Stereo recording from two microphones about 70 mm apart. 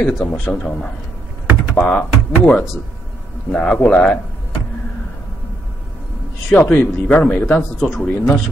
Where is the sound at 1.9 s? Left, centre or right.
Centre.